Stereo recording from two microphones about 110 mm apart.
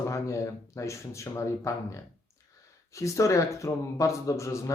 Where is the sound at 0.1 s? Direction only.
30° left (ahead or behind).